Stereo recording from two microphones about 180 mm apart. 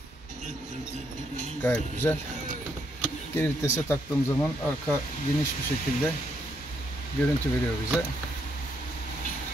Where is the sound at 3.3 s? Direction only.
15° left (ahead or behind).